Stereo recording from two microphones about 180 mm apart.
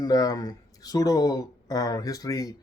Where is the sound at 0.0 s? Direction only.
20° left (ahead or behind).